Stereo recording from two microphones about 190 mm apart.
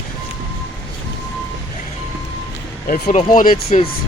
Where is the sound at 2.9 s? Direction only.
40° left (ahead or behind).